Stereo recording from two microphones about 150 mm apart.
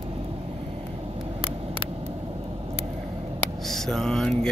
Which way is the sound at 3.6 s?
Centre (ahead or behind).